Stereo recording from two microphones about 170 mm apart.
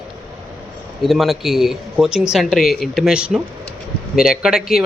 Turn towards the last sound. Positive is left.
turn(degrees=0)  # may be behind; listen again after turning